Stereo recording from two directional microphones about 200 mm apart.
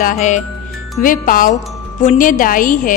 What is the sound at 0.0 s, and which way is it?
A woman's voice, 40° left (ahead or behind).